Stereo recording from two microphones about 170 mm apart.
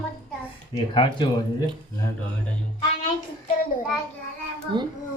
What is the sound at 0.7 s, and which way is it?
Speech, 30° left (ahead or behind).